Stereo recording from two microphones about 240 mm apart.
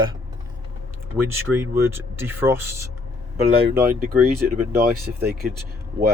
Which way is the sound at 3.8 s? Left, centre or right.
Right.